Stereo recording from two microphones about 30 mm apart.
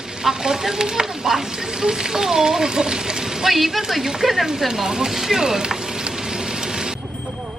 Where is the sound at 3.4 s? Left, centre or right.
Centre.